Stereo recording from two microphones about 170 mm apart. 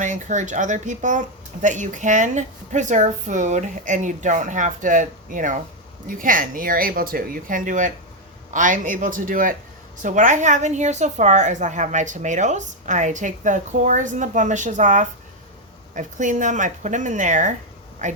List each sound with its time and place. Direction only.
0.0 s a woman's voice: 45° right (ahead or behind)